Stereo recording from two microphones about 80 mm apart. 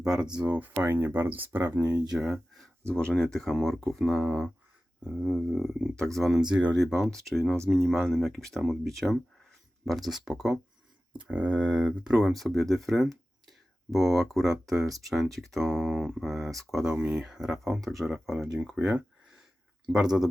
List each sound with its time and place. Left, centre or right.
0.0 s speech: centre
2.0 s speech: centre
2.8 s speech: centre
6.5 s speech: centre
6.7 s speech: centre
11.1 s speech: centre